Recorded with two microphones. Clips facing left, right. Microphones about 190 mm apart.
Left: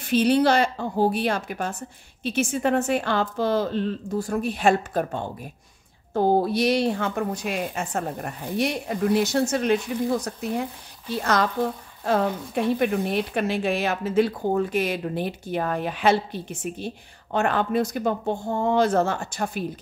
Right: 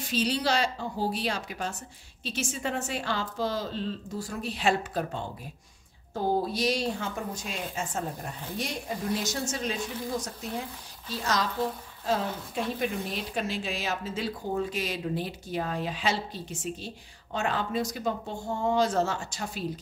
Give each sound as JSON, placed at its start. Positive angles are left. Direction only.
{"t": 0.0, "sound": "speech", "side_deg": 60}